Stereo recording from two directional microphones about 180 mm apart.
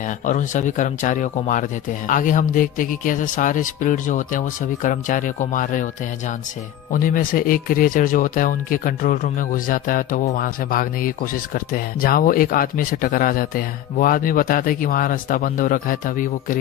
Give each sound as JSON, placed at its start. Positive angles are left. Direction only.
{"t": 0.2, "sound": "speech", "side_deg": 45}
{"t": 6.9, "sound": "speech", "side_deg": 50}